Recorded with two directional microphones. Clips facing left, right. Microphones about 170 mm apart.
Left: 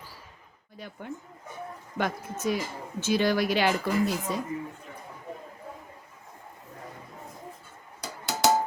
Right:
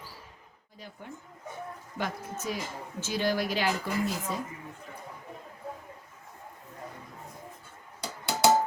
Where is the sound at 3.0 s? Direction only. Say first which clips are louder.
Left 5 dB; 70° left (ahead or behind).